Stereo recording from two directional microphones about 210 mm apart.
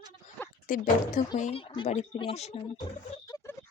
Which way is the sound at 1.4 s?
25° left (ahead or behind).